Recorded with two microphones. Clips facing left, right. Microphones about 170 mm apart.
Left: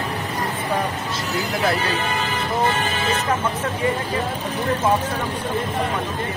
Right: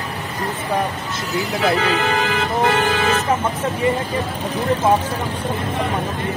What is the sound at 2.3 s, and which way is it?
Music, 90° right.